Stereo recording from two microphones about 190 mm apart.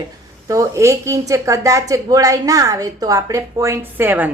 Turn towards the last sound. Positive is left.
turn(degrees=-10)  # may be behind; listen again after turning